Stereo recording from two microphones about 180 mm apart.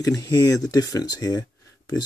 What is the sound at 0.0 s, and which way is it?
Speech, 20° left (ahead or behind).